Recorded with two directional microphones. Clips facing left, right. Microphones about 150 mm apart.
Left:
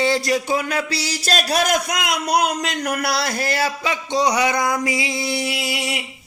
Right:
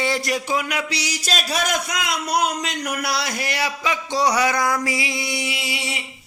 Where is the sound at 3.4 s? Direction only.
30° left (ahead or behind).